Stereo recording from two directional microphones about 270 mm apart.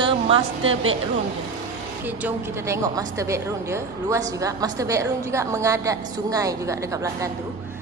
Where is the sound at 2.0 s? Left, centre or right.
Centre.